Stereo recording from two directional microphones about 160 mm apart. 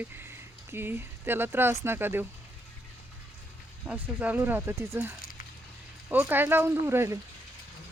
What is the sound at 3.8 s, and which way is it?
Speech, 10° right (ahead or behind).